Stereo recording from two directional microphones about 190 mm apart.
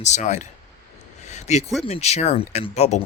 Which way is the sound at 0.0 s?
40° left (ahead or behind).